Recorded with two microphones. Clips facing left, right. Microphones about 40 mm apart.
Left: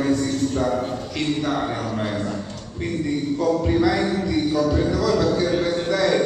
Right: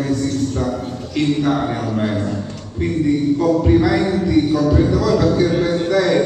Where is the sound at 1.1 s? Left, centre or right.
Centre.